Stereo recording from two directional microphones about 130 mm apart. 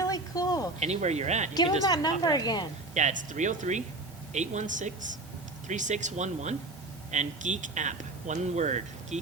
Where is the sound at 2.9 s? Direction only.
65° right (ahead or behind).